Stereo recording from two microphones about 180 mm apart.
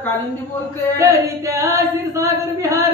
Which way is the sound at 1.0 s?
15° right (ahead or behind).